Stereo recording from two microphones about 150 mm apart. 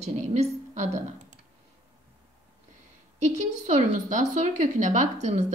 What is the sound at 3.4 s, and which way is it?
A woman's voice, 55° right (ahead or behind).